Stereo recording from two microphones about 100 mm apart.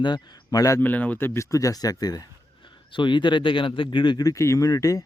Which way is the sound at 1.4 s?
35° left (ahead or behind).